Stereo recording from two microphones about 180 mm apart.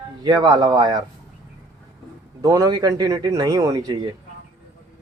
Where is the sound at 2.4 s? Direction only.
20° right (ahead or behind).